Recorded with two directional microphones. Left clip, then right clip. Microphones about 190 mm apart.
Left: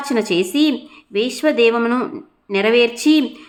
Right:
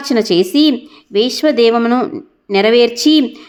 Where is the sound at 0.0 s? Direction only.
25° right (ahead or behind).